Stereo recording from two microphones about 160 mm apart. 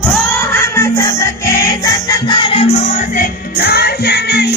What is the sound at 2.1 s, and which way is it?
Music, 30° left (ahead or behind).